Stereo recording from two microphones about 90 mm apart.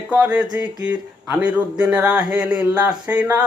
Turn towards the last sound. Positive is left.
turn(degrees=-15)  # may be behind; listen again after turning